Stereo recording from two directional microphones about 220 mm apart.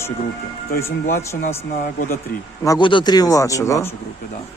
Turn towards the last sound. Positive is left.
turn(degrees=15)  # may be behind; listen again after turning